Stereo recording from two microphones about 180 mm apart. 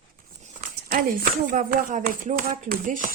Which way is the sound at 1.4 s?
50° right (ahead or behind).